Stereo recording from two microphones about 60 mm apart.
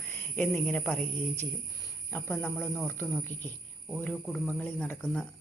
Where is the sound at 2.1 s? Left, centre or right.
Left.